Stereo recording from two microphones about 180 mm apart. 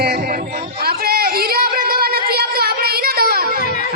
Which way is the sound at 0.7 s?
60° right (ahead or behind).